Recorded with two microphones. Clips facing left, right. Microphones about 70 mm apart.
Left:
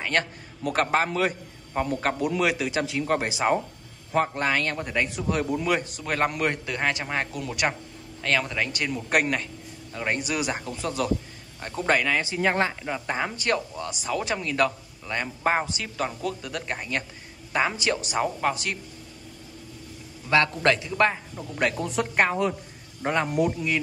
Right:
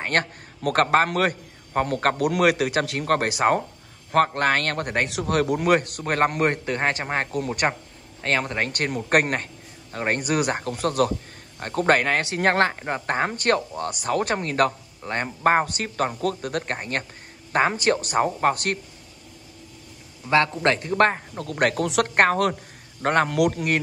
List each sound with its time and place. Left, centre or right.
0.0 s a man's voice: right
0.6 s speech: right
20.2 s a man's voice: right
20.8 s speech: right
21.4 s speech: right